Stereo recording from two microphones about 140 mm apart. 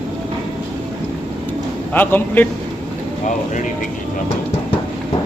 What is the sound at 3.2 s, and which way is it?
Speech, 65° left (ahead or behind).